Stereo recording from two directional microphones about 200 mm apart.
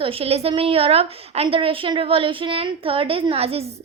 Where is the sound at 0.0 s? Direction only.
30° right (ahead or behind).